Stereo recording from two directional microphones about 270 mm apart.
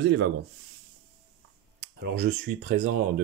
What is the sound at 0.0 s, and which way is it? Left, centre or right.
Speech, right.